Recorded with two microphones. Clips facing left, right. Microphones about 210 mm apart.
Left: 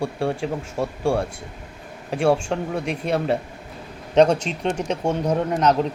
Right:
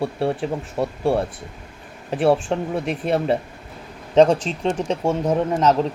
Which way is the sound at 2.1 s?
5° right (ahead or behind).